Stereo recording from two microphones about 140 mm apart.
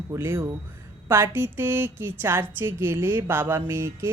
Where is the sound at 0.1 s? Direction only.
20° right (ahead or behind).